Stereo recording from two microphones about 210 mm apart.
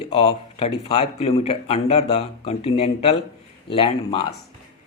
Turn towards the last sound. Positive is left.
turn(degrees=25)  # may be behind; listen again after turning